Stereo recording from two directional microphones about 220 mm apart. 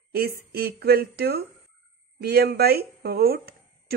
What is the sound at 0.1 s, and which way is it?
A woman's voice, 45° right (ahead or behind).